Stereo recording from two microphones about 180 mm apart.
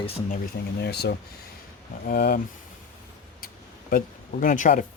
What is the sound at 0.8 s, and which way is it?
Speech, 65° left (ahead or behind).